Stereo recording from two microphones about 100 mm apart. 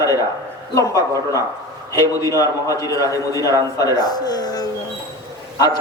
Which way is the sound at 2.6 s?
35° left (ahead or behind).